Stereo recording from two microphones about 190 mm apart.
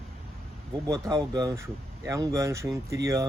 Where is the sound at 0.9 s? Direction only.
20° right (ahead or behind).